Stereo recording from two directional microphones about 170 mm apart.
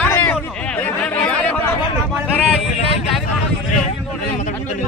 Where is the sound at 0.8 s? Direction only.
10° left (ahead or behind).